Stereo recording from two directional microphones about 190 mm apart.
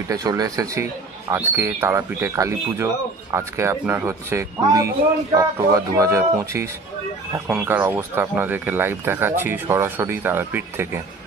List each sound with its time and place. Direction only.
0.1 s speech: 20° right (ahead or behind)